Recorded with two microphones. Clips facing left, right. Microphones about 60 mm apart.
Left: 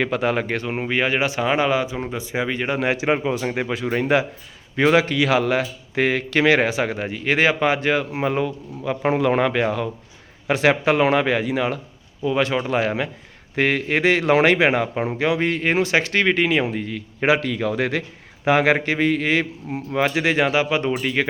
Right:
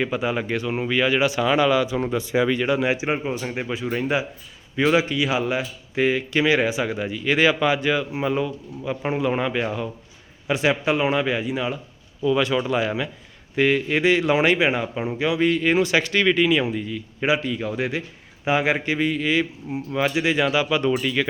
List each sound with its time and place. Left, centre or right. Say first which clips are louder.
0.0 s speech: left 3 dB; left
12.2 s speech: even; left
13.6 s speech: even; left
16.7 s speech: left 1 dB; left
21.0 s speech: left 1 dB; left